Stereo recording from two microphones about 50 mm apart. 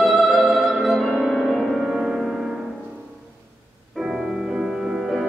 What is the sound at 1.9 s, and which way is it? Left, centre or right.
Music, centre.